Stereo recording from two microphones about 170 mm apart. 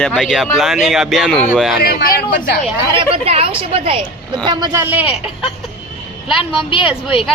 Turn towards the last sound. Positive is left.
turn(degrees=30)  # may be behind; listen again after turning